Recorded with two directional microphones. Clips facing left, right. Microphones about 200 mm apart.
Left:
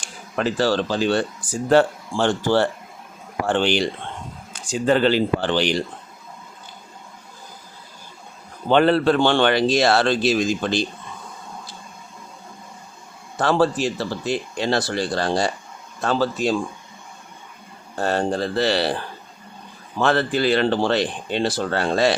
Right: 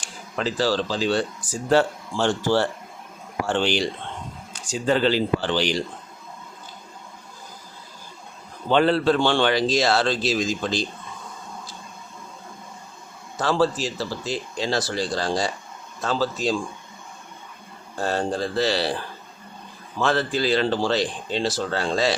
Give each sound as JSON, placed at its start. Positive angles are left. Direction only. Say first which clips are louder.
{"t": 0.0, "sound": "a man's voice", "louder": "left 3 dB", "side_deg": 60}
{"t": 8.7, "sound": "a man's voice", "louder": "left 2 dB", "side_deg": 55}
{"t": 13.4, "sound": "a man's voice", "louder": "left 3 dB", "side_deg": 60}
{"t": 17.9, "sound": "a man's voice", "louder": "left 3 dB", "side_deg": 60}
{"t": 20.0, "sound": "a man's voice", "louder": "left 3 dB", "side_deg": 60}